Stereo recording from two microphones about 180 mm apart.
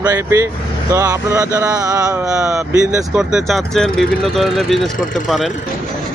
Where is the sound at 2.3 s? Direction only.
5° right (ahead or behind).